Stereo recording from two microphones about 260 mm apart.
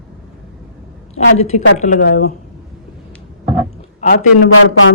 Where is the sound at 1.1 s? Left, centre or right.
Left.